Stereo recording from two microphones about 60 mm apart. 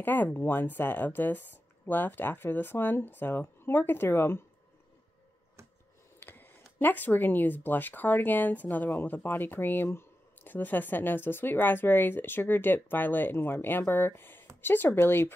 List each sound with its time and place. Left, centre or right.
0.0 s speech: left
6.1 s a sound: left
6.8 s speech: left